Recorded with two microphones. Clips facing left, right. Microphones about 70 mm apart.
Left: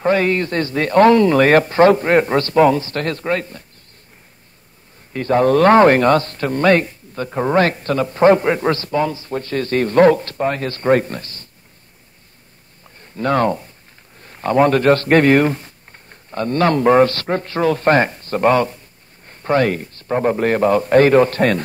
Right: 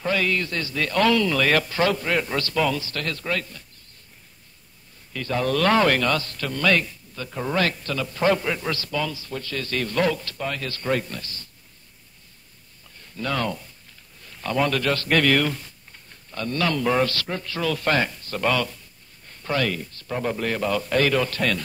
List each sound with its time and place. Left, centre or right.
0.0 s a man's voice: left
5.1 s a man's voice: left
12.8 s a sound: left
14.2 s a man's voice: left